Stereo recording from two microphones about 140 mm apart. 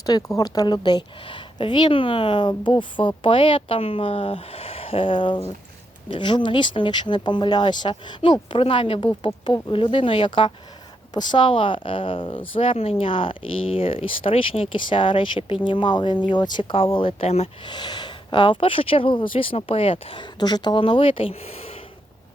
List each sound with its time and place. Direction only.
0.0 s speech: 25° left (ahead or behind); by 17.5 s 45° left (ahead or behind)
17.7 s speech: 30° left (ahead or behind)
20.4 s speech: 30° left (ahead or behind); by 21.8 s 45° left (ahead or behind)